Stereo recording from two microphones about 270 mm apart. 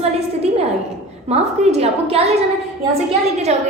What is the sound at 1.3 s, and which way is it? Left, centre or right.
Speech, right.